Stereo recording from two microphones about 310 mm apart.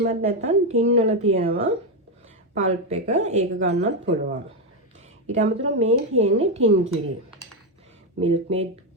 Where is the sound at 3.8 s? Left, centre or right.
Right.